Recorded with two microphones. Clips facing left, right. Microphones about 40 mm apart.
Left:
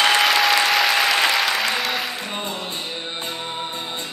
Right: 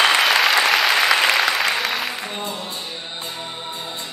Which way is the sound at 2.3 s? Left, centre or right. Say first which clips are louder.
Even; left.